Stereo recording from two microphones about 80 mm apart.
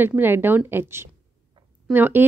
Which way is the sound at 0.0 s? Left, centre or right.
Right.